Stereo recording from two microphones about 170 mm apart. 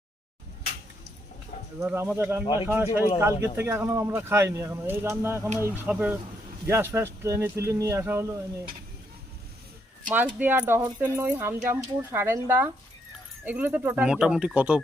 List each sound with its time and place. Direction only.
1.8 s speech: 15° right (ahead or behind)
10.3 s speech: 10° right (ahead or behind)